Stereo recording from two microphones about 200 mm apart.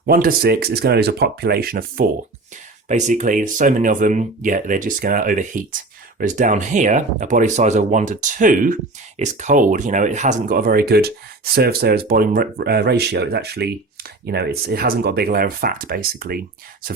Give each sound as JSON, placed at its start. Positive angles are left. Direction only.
{"t": 0.0, "sound": "speech", "side_deg": -45}
{"t": 2.9, "sound": "speech", "side_deg": -35}